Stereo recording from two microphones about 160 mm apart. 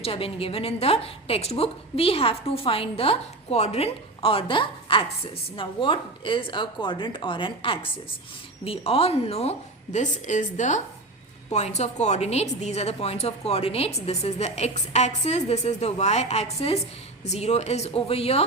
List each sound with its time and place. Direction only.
0.0 s a woman's voice: 35° left (ahead or behind)